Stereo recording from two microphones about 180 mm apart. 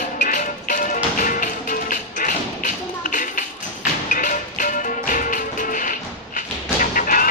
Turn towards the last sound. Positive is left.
turn(degrees=50)  # may be behind; listen again after turning